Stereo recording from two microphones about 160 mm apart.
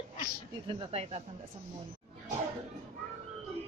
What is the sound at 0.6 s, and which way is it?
Speech, 40° right (ahead or behind).